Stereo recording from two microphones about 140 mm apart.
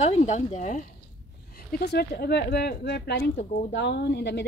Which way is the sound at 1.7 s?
90° left.